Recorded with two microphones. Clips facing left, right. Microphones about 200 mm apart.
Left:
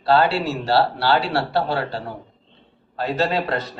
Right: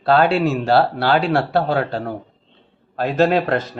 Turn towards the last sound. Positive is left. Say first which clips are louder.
# right 5 dB
turn(degrees=-50)  # may be behind; listen again after turning